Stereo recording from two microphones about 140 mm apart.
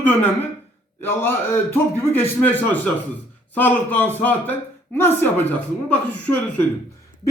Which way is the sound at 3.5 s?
15° left (ahead or behind).